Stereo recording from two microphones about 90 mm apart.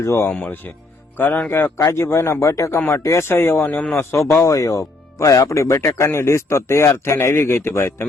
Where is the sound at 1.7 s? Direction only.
35° left (ahead or behind).